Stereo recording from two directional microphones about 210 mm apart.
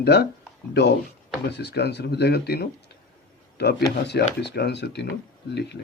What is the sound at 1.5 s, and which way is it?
Speech, 55° left (ahead or behind).